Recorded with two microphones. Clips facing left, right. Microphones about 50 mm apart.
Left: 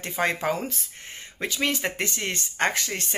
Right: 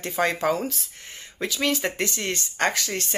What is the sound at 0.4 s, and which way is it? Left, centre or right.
Speech, left.